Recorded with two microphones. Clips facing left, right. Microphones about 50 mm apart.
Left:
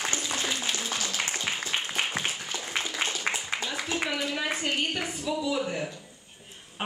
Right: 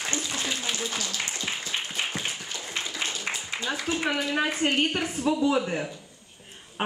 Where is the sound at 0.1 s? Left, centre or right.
Centre.